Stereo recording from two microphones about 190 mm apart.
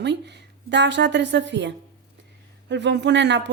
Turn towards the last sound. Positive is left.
turn(degrees=-65)  # may be behind; listen again after turning